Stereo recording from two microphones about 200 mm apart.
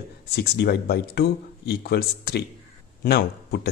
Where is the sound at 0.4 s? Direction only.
55° left (ahead or behind).